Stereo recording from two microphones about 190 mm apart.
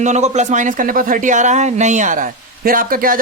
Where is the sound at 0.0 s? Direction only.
40° right (ahead or behind).